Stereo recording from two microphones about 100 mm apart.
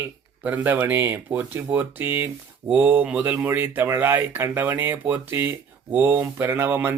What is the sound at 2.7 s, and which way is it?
Speech, 15° right (ahead or behind).